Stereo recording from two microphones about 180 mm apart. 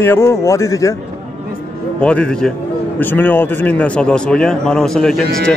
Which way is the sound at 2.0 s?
5° left (ahead or behind).